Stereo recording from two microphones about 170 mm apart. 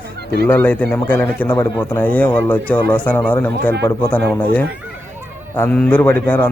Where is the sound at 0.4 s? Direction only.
10° left (ahead or behind).